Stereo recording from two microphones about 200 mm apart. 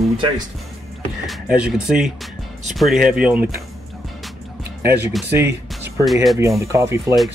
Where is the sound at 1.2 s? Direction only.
Centre (ahead or behind).